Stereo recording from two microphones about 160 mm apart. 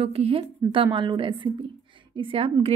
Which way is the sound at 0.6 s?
20° right (ahead or behind).